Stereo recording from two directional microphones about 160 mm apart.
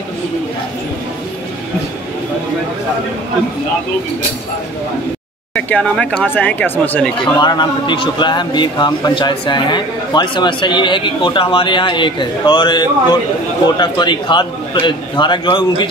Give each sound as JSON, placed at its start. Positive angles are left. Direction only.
{"t": 5.5, "sound": "speech", "side_deg": 5}
{"t": 7.3, "sound": "a man's voice", "side_deg": 30}